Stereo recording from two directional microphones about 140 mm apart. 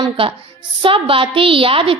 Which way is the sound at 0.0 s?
40° right (ahead or behind).